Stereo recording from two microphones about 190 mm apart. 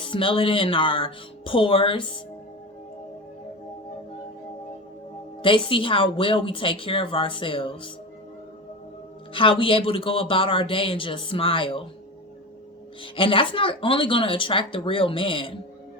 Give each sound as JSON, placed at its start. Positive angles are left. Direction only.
{"t": 0.0, "sound": "speech", "side_deg": 25}
{"t": 5.4, "sound": "speech", "side_deg": 25}
{"t": 9.3, "sound": "speech", "side_deg": 25}
{"t": 13.0, "sound": "speech", "side_deg": 30}